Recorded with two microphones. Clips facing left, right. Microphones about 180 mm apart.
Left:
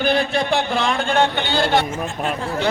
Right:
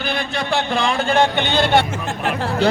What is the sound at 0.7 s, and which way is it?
Speech, centre (ahead or behind).